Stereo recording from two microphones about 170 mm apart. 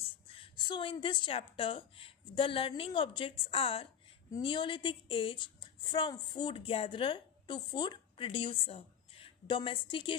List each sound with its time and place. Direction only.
0.3 s a woman's voice: 30° left (ahead or behind)